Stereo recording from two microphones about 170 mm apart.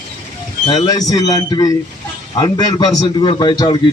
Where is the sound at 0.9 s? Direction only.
20° left (ahead or behind).